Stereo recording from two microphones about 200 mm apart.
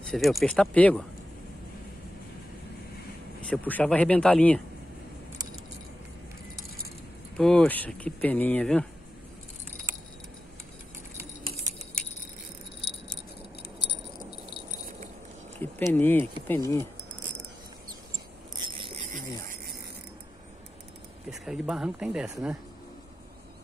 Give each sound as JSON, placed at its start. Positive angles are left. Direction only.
{"t": 0.0, "sound": "speech", "side_deg": 0}
{"t": 3.3, "sound": "speech", "side_deg": 5}
{"t": 7.3, "sound": "speech", "side_deg": 5}
{"t": 13.8, "sound": "keys jangling", "side_deg": 60}
{"t": 15.6, "sound": "speech", "side_deg": 10}
{"t": 21.3, "sound": "speech", "side_deg": 0}